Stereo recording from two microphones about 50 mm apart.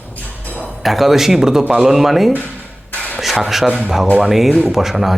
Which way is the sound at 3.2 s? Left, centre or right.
Centre.